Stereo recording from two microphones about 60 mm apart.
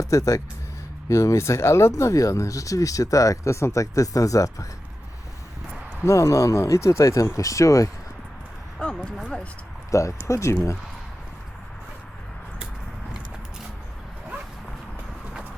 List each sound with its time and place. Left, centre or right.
0.0 s speech: left
6.1 s speech: left
9.0 s speech: centre
9.9 s speech: left